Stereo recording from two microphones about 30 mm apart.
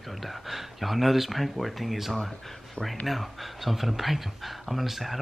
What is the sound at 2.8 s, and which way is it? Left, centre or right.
Speech, left.